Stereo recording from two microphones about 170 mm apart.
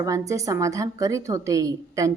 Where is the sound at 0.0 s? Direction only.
20° right (ahead or behind).